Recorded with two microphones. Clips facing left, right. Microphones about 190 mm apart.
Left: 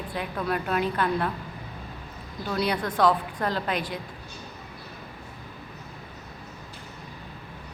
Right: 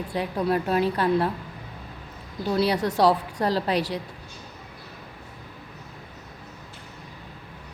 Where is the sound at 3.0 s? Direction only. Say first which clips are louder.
Right 1 dB; 35° right (ahead or behind).